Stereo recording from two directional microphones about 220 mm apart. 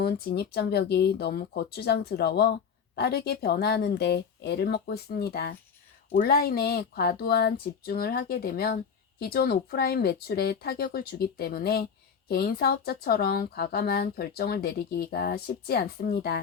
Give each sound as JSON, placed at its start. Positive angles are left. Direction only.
{"t": 0.0, "sound": "speech", "side_deg": 45}